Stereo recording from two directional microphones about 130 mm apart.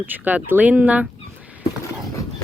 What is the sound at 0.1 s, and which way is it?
Speech, 15° right (ahead or behind).